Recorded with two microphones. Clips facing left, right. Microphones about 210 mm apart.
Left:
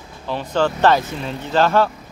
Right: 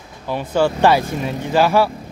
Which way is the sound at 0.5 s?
10° right (ahead or behind).